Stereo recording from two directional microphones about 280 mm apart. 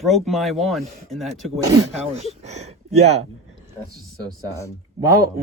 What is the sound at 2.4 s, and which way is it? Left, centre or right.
Speech, right.